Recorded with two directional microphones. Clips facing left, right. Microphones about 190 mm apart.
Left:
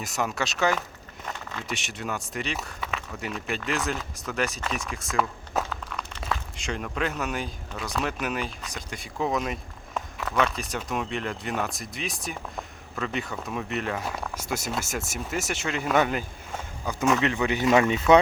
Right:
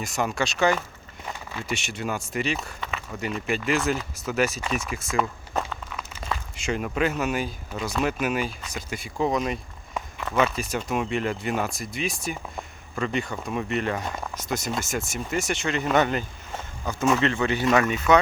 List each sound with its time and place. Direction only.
0.0 s speech: centre (ahead or behind); by 18.0 s 25° left (ahead or behind)